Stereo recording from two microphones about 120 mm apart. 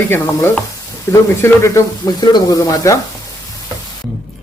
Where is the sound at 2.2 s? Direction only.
35° left (ahead or behind).